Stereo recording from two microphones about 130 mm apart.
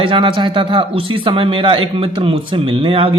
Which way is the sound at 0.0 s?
40° right (ahead or behind).